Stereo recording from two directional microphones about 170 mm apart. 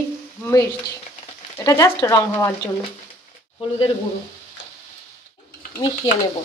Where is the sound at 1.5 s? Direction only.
20° left (ahead or behind).